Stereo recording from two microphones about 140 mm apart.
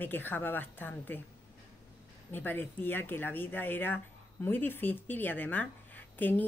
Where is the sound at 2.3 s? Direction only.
15° left (ahead or behind).